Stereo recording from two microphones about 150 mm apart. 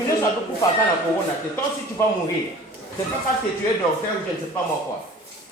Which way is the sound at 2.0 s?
20° left (ahead or behind).